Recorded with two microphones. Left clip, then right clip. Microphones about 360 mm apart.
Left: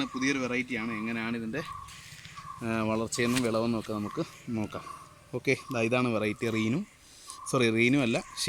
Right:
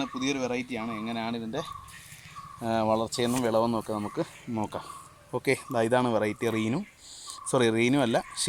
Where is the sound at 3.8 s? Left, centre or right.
Right.